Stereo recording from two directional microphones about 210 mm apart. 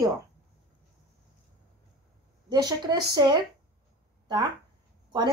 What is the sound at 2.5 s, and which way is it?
Speech, 20° right (ahead or behind).